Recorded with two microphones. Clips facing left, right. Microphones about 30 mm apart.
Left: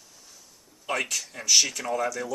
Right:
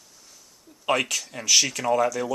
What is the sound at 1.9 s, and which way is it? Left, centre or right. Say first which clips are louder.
Speech: right 7 dB; right.